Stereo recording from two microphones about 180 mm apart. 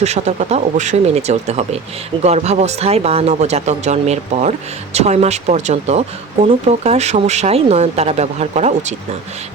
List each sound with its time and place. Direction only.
0.0 s speech: 40° right (ahead or behind)